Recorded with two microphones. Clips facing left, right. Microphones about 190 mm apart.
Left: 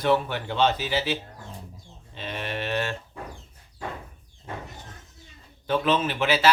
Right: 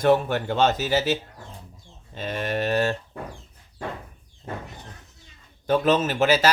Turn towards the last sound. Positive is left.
turn(degrees=-40)  # may be behind; listen again after turning